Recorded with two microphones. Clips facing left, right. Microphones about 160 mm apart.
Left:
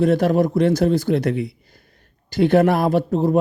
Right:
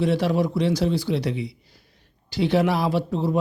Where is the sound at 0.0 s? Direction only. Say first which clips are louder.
Left 5 dB; 50° left (ahead or behind).